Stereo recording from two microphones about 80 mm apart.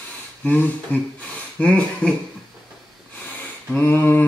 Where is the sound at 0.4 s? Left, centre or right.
Centre.